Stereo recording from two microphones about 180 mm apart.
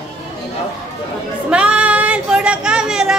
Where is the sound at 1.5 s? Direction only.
5° right (ahead or behind).